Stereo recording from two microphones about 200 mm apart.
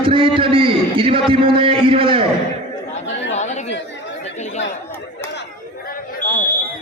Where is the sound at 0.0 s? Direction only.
25° right (ahead or behind).